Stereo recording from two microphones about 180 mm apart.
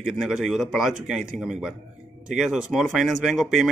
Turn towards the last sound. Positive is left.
turn(degrees=0)  # may be behind; listen again after turning